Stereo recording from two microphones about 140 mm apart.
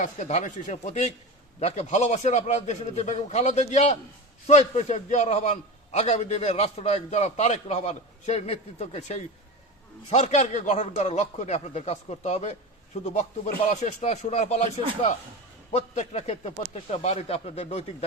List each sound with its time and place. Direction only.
0.0 s a man's voice: 55° left (ahead or behind)